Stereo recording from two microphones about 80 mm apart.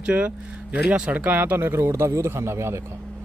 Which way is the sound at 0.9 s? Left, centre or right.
Centre.